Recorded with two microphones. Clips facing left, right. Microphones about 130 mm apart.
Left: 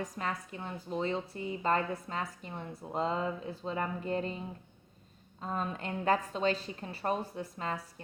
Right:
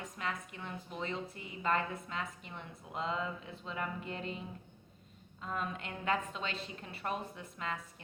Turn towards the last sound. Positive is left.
turn(degrees=35)  # may be behind; listen again after turning